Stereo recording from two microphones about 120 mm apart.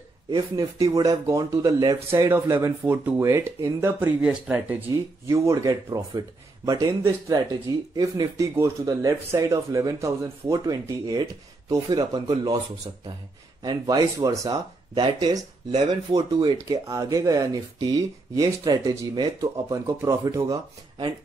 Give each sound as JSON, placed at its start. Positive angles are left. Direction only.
{"t": 0.3, "sound": "speech", "side_deg": -30}
{"t": 4.2, "sound": "speech", "side_deg": -10}
{"t": 5.3, "sound": "speech", "side_deg": -25}
{"t": 7.9, "sound": "speech", "side_deg": -30}
{"t": 13.6, "sound": "speech", "side_deg": -35}
{"t": 15.0, "sound": "speech", "side_deg": -40}